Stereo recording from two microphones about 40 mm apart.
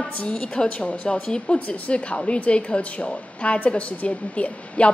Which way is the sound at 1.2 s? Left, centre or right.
Left.